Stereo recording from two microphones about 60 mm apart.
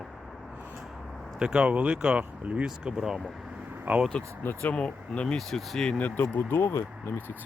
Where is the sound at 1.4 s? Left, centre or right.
Centre.